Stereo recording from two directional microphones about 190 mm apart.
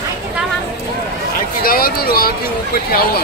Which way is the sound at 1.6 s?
50° left (ahead or behind).